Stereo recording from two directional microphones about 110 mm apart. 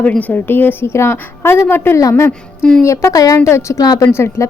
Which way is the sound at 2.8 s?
25° left (ahead or behind).